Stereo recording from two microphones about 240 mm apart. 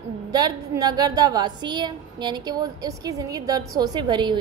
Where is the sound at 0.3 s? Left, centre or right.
Centre.